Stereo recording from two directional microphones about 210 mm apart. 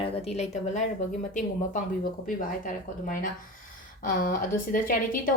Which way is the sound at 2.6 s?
40° left (ahead or behind).